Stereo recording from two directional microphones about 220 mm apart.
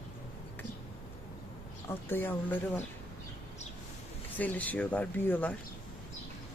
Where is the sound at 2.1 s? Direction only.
10° left (ahead or behind).